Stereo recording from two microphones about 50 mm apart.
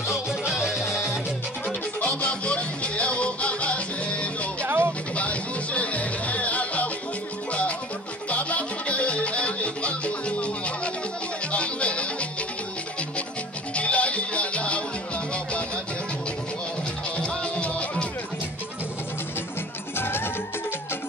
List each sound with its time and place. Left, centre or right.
0.5 s music: centre
1.7 s music: left
4.6 s music: right
5.1 s music: left
8.3 s music: left
13.7 s music: left
17.2 s music: centre
20.0 s music: left